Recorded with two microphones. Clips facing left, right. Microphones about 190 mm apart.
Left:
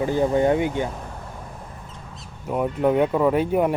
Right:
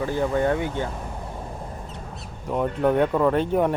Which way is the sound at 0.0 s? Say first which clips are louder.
Left 3 dB; 15° left (ahead or behind).